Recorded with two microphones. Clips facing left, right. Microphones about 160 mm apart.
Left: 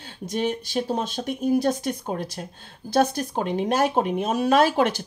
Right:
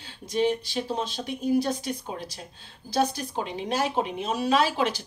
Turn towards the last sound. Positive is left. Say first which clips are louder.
# left 5 dB
turn(degrees=50)  # may be behind; listen again after turning